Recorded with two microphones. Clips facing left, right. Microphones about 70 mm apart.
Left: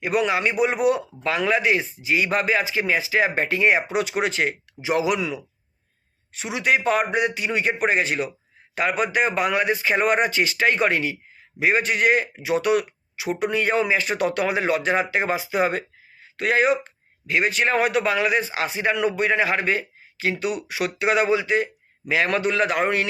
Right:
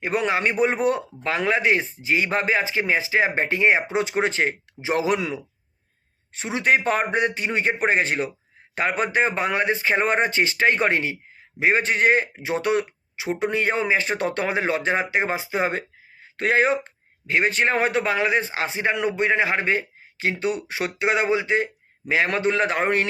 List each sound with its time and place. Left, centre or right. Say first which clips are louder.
0.0 s a man's voice: left 1 dB; right